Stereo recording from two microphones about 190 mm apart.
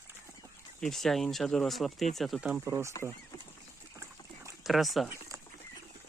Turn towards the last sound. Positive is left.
turn(degrees=0)  # may be behind; listen again after turning